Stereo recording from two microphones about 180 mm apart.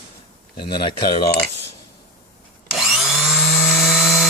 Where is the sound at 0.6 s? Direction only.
25° left (ahead or behind).